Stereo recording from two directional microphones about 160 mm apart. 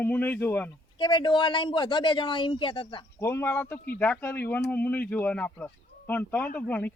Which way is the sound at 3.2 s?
15° left (ahead or behind).